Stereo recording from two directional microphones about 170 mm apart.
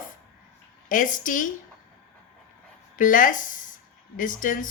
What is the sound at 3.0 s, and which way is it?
A woman's voice, 50° left (ahead or behind).